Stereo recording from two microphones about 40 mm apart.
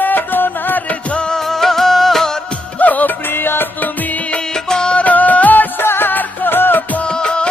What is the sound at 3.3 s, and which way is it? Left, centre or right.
Music, left.